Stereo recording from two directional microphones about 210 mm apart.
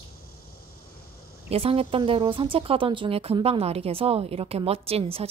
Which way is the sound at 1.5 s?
25° right (ahead or behind).